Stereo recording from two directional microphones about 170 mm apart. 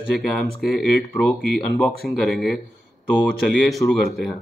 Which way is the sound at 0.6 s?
5° left (ahead or behind).